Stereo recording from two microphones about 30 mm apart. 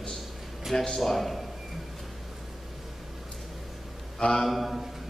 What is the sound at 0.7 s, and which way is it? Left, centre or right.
Speech, centre.